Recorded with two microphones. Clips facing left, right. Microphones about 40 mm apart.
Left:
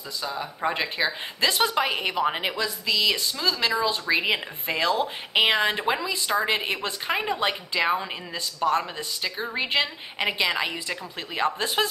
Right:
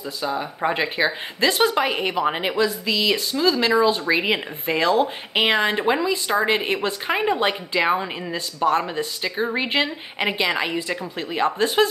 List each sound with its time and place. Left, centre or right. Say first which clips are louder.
0.2 s a woman's voice: right 4 dB; centre